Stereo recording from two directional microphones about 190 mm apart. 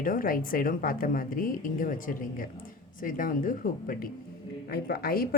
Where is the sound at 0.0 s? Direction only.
45° left (ahead or behind).